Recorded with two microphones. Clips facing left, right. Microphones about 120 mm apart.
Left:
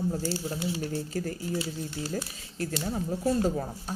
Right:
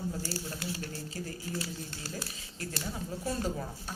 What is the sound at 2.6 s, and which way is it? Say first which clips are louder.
A woman's voice: left 7 dB; 45° left (ahead or behind).